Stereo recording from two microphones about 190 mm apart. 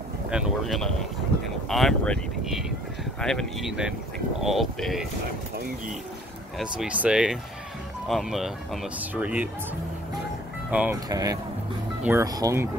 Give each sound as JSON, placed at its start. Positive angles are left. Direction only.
{"t": 0.3, "sound": "speech", "side_deg": 0}
{"t": 6.6, "sound": "speech", "side_deg": -5}
{"t": 10.7, "sound": "speech", "side_deg": -5}
{"t": 11.1, "sound": "speech", "side_deg": -20}